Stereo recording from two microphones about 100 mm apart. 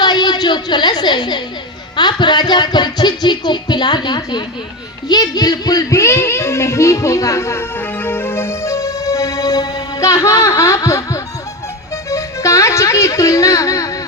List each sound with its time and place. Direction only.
0.0 s a woman's voice: 45° left (ahead or behind)
2.0 s a sound: 45° left (ahead or behind)
5.0 s speech: 40° left (ahead or behind)